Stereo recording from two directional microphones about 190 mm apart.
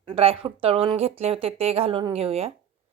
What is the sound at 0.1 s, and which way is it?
A woman's voice, 30° right (ahead or behind).